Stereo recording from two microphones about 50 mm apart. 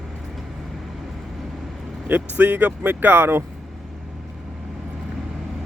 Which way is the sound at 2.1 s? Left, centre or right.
Right.